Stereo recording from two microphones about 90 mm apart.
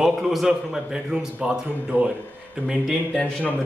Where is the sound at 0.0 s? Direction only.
5° right (ahead or behind).